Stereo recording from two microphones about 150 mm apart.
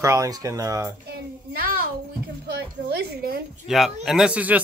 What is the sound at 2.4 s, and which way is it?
A woman's voice, 90° right.